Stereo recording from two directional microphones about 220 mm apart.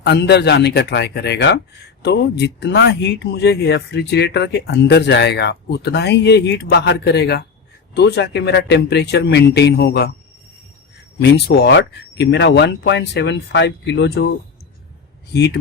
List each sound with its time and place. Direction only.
0.0 s a man's voice: 50° left (ahead or behind)
11.2 s a man's voice: 50° left (ahead or behind)
15.3 s a man's voice: 50° left (ahead or behind)